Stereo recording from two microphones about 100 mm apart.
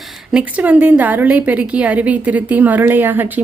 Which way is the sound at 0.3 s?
15° right (ahead or behind).